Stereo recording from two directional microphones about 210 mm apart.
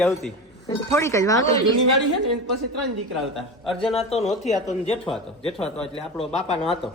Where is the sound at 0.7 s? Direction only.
15° left (ahead or behind).